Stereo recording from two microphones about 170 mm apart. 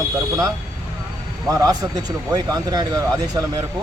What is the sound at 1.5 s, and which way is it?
Speech, 20° right (ahead or behind).